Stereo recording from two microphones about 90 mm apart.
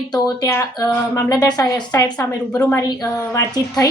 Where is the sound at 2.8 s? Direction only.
45° left (ahead or behind).